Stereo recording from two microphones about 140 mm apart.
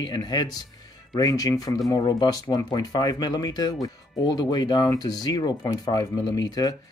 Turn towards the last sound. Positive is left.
turn(degrees=25)  # may be behind; listen again after turning